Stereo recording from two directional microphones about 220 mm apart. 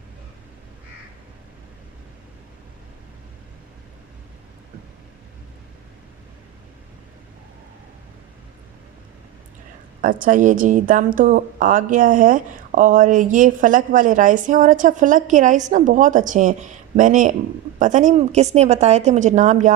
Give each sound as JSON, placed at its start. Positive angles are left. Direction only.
{"t": 10.0, "sound": "a woman's voice", "side_deg": -40}